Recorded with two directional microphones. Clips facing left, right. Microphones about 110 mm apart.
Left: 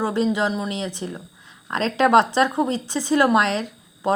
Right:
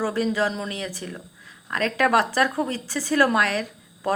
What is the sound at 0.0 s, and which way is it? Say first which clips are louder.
A woman's voice: left 2 dB; 20° left (ahead or behind).